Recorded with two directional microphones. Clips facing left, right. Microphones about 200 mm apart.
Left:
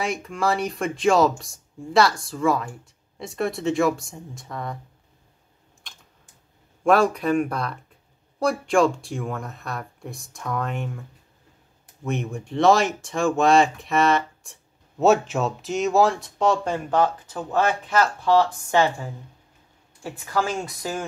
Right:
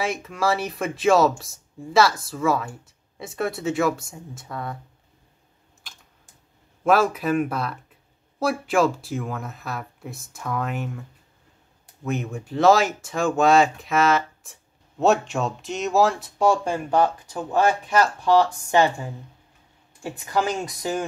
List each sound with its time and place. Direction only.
0.0 s speech: centre (ahead or behind)
6.8 s a woman's voice: 5° right (ahead or behind)